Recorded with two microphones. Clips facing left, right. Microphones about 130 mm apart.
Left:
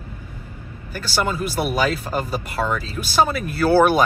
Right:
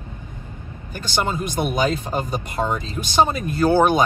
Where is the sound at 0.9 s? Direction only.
20° right (ahead or behind).